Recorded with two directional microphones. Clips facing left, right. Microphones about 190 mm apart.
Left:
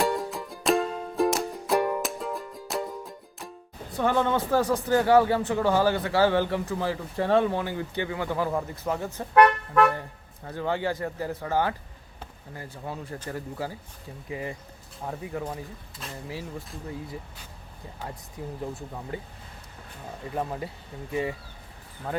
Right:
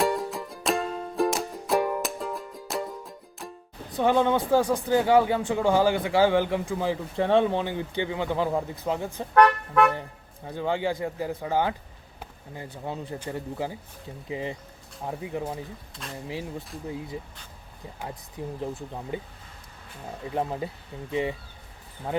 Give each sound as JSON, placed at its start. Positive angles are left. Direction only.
{"t": 0.0, "sound": "music", "side_deg": 0}
{"t": 3.9, "sound": "a man's voice", "side_deg": -15}
{"t": 9.3, "sound": "toot", "side_deg": 5}
{"t": 10.4, "sound": "a man's voice", "side_deg": -15}
{"t": 12.2, "sound": "basketball bounce", "side_deg": -20}
{"t": 12.8, "sound": "speech", "side_deg": -20}
{"t": 16.0, "sound": "speech", "side_deg": 5}
{"t": 18.4, "sound": "speech", "side_deg": -25}
{"t": 20.3, "sound": "speech", "side_deg": -20}